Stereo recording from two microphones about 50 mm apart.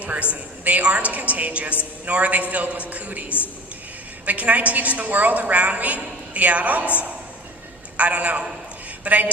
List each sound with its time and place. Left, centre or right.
0.0 s a woman's voice: right
7.9 s a man's voice: right